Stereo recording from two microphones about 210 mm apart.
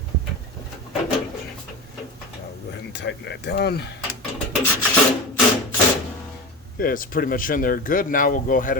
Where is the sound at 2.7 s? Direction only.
55° left (ahead or behind).